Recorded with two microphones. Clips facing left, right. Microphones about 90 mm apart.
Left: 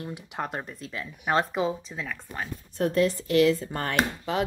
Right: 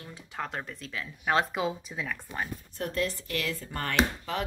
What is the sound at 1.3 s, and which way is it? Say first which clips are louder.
Speech: left 3 dB; 5° right (ahead or behind).